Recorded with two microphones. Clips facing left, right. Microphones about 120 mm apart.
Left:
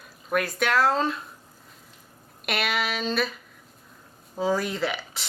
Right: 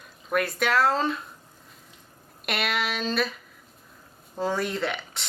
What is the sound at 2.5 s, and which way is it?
Speech, centre (ahead or behind).